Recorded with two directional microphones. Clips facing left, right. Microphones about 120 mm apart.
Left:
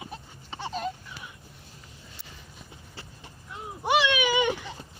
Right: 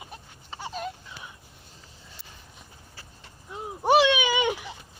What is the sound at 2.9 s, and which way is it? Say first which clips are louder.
Vehicle: left 4 dB; 25° left (ahead or behind).